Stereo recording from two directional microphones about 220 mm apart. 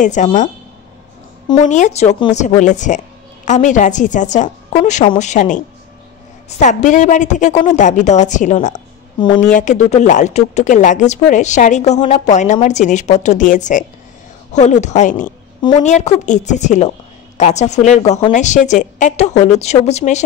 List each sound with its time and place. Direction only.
0.0 s speech: 35° left (ahead or behind)
1.6 s speech: 35° left (ahead or behind)
6.6 s speech: 35° left (ahead or behind)